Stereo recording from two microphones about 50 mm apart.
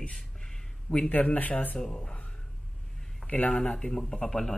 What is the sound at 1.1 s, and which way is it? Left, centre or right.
Speech, left.